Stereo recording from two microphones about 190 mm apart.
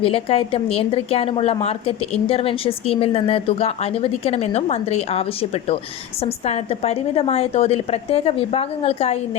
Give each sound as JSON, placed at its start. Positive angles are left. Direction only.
{"t": 0.0, "sound": "a woman's voice", "side_deg": 30}